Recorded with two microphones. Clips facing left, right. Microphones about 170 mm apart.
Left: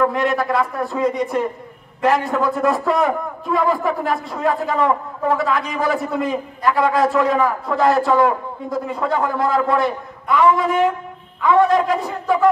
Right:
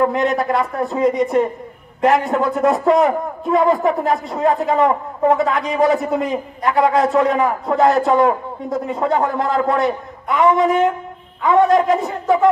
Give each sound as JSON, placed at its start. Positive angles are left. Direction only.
{"t": 0.0, "sound": "a man's voice", "side_deg": -20}